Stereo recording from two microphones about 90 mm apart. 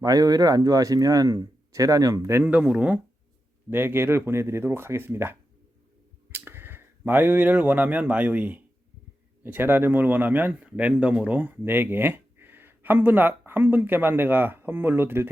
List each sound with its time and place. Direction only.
0.0 s speech: 45° right (ahead or behind)
2.4 s speech: 10° right (ahead or behind)
3.7 s speech: 25° right (ahead or behind)